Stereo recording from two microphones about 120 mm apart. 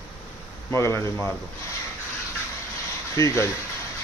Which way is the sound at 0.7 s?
25° left (ahead or behind).